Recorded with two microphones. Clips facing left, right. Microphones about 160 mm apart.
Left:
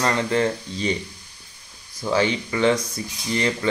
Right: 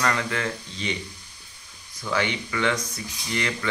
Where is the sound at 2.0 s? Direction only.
30° left (ahead or behind).